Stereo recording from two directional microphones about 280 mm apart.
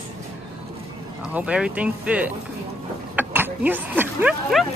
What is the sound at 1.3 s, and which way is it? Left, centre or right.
Speech, centre.